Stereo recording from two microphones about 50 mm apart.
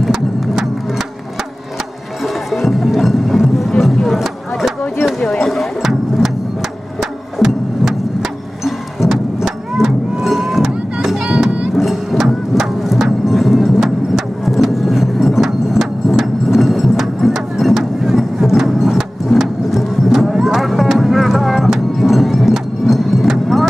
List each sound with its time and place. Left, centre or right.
0.0 s music: centre
2.2 s music: centre
3.8 s a sound: centre
5.4 s music: centre
5.8 s music: centre
11.2 s music: centre
11.7 s a sound: centre
20.3 s music: centre